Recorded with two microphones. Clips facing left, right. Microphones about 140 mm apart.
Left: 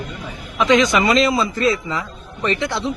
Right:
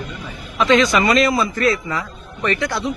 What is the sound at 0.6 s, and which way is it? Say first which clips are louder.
A man's voice: even; 15° left (ahead or behind).